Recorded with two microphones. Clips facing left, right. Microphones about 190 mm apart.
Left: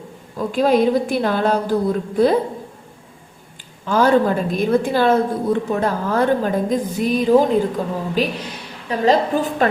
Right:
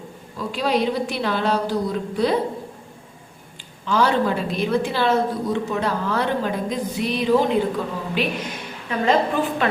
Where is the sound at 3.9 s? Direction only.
45° left (ahead or behind).